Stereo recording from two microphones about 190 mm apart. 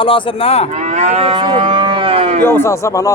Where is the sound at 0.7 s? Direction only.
35° right (ahead or behind).